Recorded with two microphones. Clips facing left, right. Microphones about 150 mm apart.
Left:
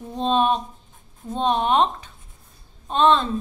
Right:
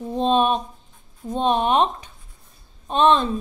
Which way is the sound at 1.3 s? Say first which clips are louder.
Right 1 dB; 15° right (ahead or behind).